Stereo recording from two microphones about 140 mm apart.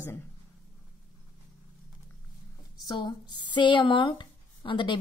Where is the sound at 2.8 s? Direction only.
30° left (ahead or behind).